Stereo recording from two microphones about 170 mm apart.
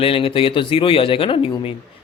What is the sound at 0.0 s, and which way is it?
A man's voice, 35° left (ahead or behind).